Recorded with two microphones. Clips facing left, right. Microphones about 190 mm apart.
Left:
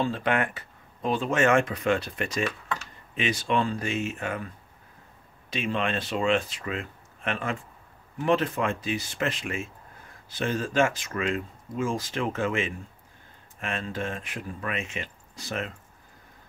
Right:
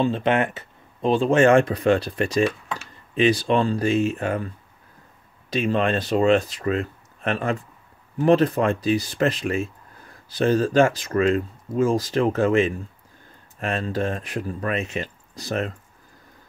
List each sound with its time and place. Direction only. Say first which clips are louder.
0.0 s speech: right 5 dB; 25° right (ahead or behind)
5.5 s speech: right 7 dB; 40° right (ahead or behind)